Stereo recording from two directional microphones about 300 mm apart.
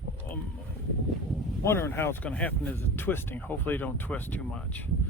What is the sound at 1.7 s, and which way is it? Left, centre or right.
Speech, centre.